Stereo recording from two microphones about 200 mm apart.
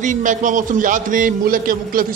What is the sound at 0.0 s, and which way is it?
A man's voice, 40° right (ahead or behind).